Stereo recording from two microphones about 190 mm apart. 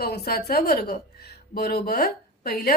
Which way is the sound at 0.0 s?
55° left (ahead or behind).